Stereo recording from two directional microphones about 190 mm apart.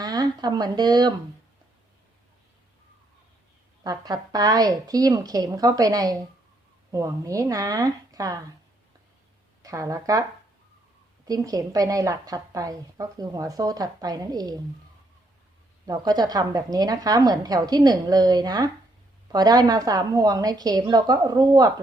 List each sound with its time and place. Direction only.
0.0 s speech: 20° right (ahead or behind)
3.8 s a woman's voice: 20° right (ahead or behind)
9.6 s speech: 15° right (ahead or behind)
11.3 s a woman's voice: 20° right (ahead or behind)
15.9 s a woman's voice: 20° right (ahead or behind)